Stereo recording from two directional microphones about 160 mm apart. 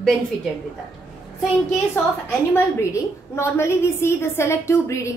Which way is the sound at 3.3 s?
15° left (ahead or behind).